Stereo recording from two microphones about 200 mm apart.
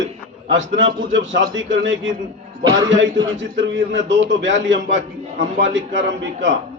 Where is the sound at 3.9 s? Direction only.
65° right (ahead or behind).